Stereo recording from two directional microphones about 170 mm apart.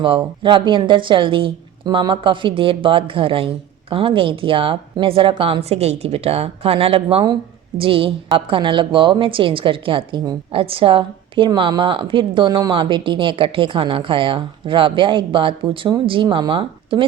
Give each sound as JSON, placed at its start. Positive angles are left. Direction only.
{"t": 0.0, "sound": "a woman's voice", "side_deg": -30}